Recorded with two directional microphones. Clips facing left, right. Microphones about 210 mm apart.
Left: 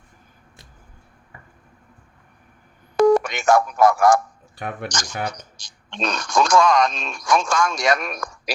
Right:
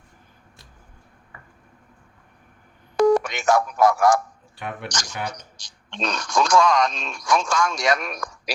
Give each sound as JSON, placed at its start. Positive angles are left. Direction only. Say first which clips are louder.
{"t": 3.0, "sound": "speech", "louder": "left 2 dB", "side_deg": 50}